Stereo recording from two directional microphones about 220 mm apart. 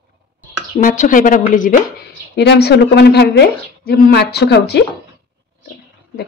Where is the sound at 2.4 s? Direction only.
50° left (ahead or behind).